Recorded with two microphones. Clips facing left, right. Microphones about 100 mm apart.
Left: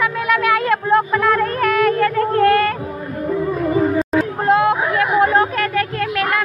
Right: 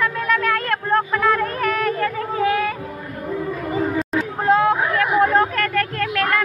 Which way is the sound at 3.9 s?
5° left (ahead or behind).